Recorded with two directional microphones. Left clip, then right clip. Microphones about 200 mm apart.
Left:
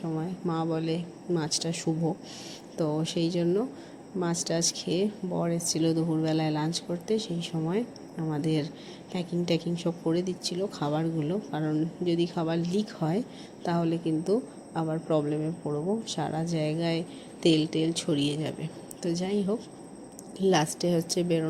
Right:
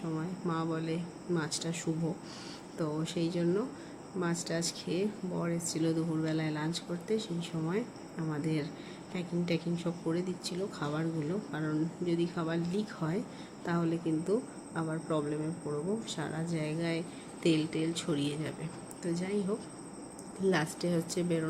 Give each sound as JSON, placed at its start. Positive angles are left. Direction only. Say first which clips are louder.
{"t": 0.2, "sound": "speech", "louder": "left 5 dB", "side_deg": 20}
{"t": 3.0, "sound": "speech", "louder": "left 5 dB", "side_deg": 20}